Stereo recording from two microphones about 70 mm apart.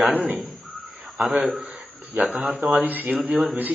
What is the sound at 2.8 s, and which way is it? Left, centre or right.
Speech, right.